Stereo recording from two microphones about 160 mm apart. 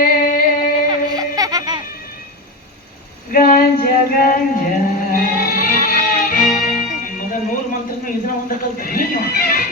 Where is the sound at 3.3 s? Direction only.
60° left (ahead or behind).